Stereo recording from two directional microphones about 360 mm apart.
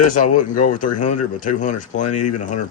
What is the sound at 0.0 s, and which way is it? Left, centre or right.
Speech, left.